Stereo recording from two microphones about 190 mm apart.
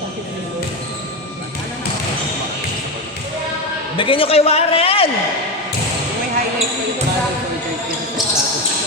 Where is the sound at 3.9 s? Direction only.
25° left (ahead or behind).